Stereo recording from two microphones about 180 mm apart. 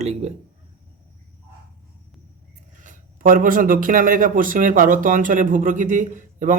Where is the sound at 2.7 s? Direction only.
45° right (ahead or behind).